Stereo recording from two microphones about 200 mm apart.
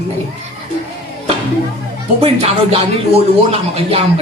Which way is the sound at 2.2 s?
30° right (ahead or behind).